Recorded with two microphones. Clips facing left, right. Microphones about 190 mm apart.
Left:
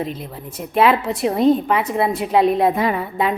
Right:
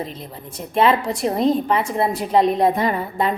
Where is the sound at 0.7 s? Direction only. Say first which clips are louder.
Left 1 dB; 5° left (ahead or behind).